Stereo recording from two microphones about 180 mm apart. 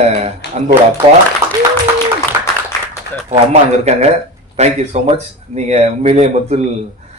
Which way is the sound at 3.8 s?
40° right (ahead or behind).